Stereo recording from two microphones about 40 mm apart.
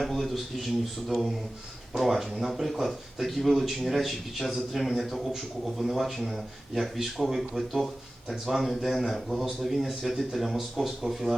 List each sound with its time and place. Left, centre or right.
0.0 s speech: centre